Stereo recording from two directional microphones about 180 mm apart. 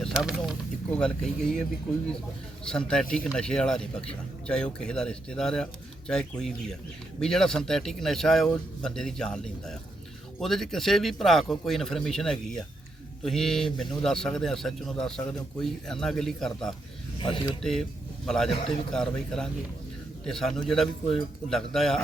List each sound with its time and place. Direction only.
0.0 s a man's voice: 5° right (ahead or behind)
2.6 s a man's voice: 5° left (ahead or behind)
17.2 s speech: 25° left (ahead or behind)
17.6 s a man's voice: centre (ahead or behind)